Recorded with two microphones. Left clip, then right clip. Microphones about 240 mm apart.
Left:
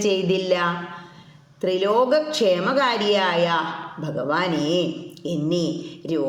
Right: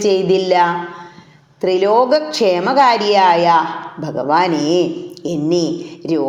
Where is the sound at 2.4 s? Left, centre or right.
Left.